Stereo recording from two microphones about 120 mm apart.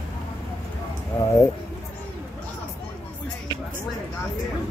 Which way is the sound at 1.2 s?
25° left (ahead or behind).